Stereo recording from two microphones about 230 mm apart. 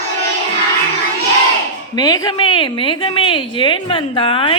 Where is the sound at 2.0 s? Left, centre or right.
Centre.